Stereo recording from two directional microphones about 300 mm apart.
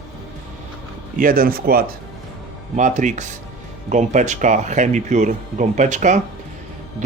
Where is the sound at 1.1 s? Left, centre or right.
Right.